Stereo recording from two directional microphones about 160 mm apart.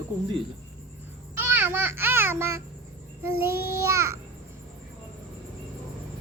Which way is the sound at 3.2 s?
15° right (ahead or behind).